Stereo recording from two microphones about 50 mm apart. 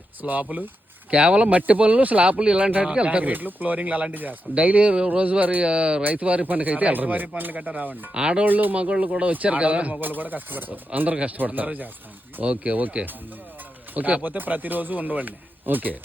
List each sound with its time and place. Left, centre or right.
0.2 s speech: right
1.1 s speech: right
5.6 s speech: centre; by 7.9 s right
8.1 s speech: centre
8.4 s speech: right
8.8 s speech: right
13.9 s speech: right